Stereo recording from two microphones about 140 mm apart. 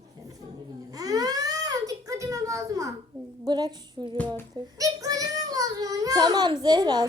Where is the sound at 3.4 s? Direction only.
30° right (ahead or behind).